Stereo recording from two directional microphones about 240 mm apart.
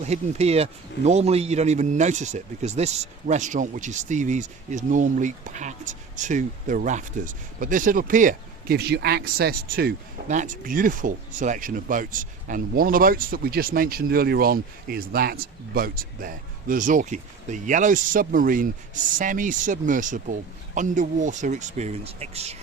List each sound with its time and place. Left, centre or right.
0.0 s speech: right